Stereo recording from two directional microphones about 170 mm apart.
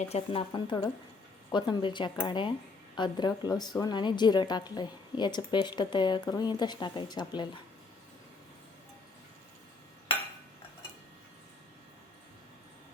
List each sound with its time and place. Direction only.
0.1 s a woman's voice: 30° left (ahead or behind)